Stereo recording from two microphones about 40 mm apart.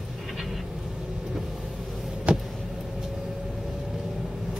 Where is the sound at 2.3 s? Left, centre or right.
Right.